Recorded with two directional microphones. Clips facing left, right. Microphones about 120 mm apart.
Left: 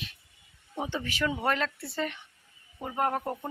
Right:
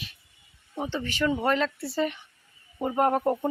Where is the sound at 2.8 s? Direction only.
25° right (ahead or behind).